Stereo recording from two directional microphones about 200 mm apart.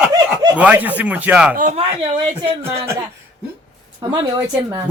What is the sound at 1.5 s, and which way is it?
Speech, 40° right (ahead or behind).